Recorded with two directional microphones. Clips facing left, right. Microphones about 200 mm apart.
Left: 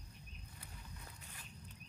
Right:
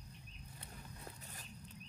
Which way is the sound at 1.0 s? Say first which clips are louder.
Right 4 dB; 40° right (ahead or behind).